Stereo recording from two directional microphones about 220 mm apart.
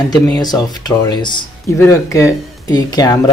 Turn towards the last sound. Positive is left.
turn(degrees=15)  # may be behind; listen again after turning